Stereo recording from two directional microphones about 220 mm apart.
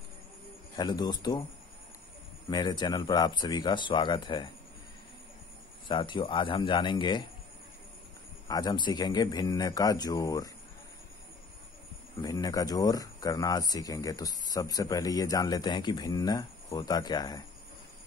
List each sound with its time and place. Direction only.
0.7 s speech: 20° left (ahead or behind)
2.5 s speech: 20° left (ahead or behind)
5.9 s speech: 20° left (ahead or behind)
8.5 s speech: 20° left (ahead or behind)
12.2 s speech: 15° left (ahead or behind)